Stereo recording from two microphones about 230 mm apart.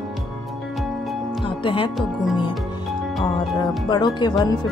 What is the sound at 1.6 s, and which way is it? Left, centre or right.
Speech, left.